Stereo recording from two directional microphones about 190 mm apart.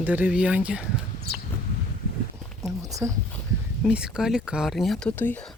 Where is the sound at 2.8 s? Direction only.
15° right (ahead or behind).